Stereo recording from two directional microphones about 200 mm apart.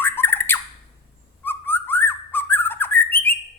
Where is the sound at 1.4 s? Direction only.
10° left (ahead or behind).